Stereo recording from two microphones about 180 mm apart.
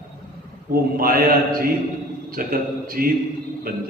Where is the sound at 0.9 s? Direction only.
55° right (ahead or behind).